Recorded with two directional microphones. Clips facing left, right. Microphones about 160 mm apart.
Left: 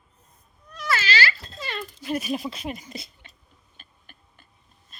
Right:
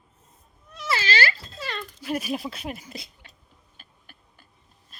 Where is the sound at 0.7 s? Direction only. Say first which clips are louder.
Left 1 dB; 25° right (ahead or behind).